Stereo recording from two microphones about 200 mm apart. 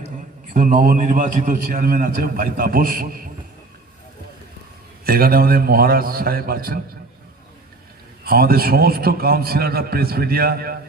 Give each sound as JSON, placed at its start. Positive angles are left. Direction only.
{"t": 0.5, "sound": "a man's voice", "side_deg": -45}
{"t": 5.0, "sound": "a man's voice", "side_deg": -50}
{"t": 8.2, "sound": "a man's voice", "side_deg": -50}